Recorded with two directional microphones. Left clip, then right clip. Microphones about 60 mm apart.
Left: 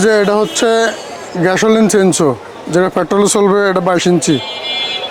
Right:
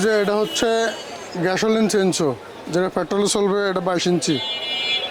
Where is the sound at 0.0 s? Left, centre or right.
Left.